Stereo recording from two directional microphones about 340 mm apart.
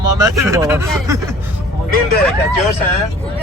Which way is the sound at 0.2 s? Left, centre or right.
Centre.